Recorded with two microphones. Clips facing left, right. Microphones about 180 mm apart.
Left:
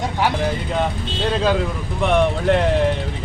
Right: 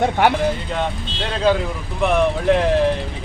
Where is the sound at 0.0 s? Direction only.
60° right (ahead or behind).